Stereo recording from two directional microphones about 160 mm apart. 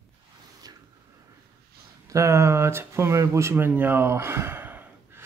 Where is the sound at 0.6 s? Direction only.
25° right (ahead or behind).